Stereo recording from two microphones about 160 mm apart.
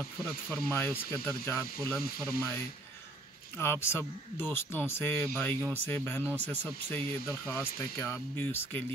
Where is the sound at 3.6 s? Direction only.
15° left (ahead or behind).